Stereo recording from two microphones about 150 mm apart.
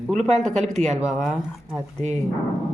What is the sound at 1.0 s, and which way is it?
Speech, 5° right (ahead or behind).